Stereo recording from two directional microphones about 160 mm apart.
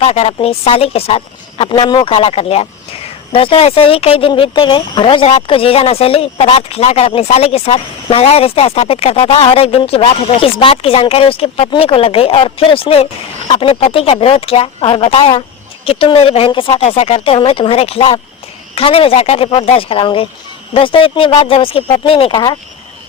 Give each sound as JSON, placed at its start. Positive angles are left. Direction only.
{"t": 0.0, "sound": "speech", "side_deg": 40}